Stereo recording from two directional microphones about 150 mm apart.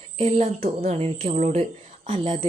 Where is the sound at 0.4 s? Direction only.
75° right (ahead or behind).